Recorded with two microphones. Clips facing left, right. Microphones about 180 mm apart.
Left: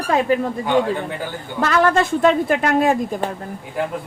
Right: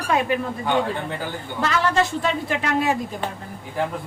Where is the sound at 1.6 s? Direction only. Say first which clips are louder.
Left 4 dB; 50° left (ahead or behind).